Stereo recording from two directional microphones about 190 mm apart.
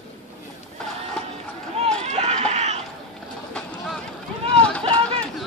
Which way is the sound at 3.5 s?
5° left (ahead or behind).